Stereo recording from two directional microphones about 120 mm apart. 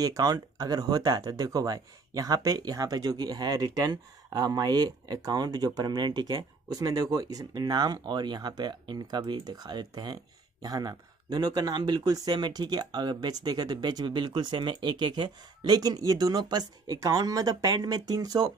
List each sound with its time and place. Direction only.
0.0 s speech: 30° right (ahead or behind)